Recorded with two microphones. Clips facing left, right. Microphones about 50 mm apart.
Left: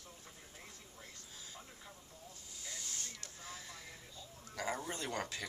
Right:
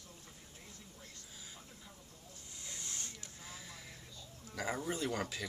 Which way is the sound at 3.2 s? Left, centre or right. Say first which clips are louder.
Left 1 dB; centre.